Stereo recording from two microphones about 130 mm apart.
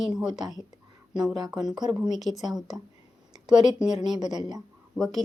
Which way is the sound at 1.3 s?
30° right (ahead or behind).